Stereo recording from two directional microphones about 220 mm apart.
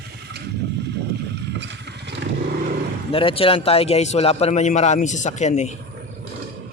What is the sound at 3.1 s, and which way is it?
A man's voice, 25° left (ahead or behind).